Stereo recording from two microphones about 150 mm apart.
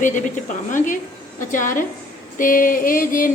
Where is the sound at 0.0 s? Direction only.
60° left (ahead or behind).